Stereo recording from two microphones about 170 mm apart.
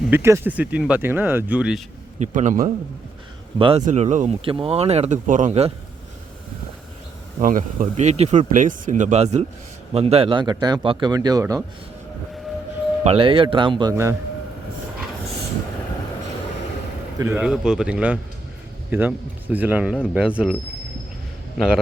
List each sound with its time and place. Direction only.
0.1 s speech: 15° right (ahead or behind)
2.1 s speech: 45° right (ahead or behind)
3.6 s speech: 30° right (ahead or behind)
3.8 s speech: 45° right (ahead or behind)
7.3 s a man's voice: 55° right (ahead or behind); by 11.6 s 20° right (ahead or behind)
13.1 s speech: 30° right (ahead or behind)
13.9 s speech: 15° right (ahead or behind)
17.2 s speech: 15° right (ahead or behind)
17.4 s speech: 5° right (ahead or behind)